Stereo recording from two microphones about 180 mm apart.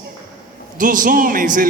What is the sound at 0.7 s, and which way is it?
Speech, 50° right (ahead or behind).